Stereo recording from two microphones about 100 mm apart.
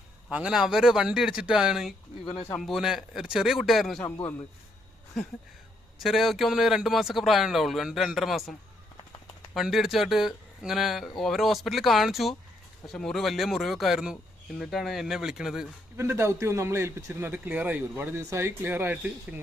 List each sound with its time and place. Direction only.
0.3 s speech: 10° right (ahead or behind)
4.0 s a man's voice: 20° left (ahead or behind)
6.0 s speech: centre (ahead or behind)
9.6 s speech: 5° right (ahead or behind)
16.0 s a man's voice: 25° right (ahead or behind)